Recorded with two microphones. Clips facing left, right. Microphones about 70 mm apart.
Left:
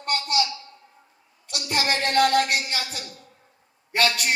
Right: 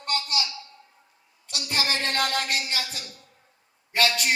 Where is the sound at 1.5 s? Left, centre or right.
Left.